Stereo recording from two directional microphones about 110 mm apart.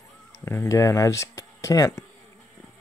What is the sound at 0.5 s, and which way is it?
Speech, 25° left (ahead or behind).